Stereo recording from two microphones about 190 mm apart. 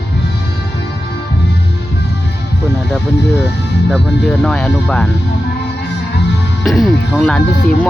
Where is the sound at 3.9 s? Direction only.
5° left (ahead or behind).